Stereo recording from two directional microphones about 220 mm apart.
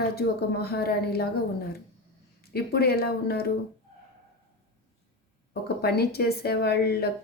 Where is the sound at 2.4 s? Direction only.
45° left (ahead or behind).